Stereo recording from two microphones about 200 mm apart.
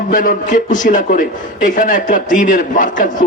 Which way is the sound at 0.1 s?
40° left (ahead or behind).